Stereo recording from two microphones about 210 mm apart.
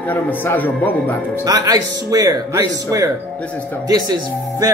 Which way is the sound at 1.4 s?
15° right (ahead or behind).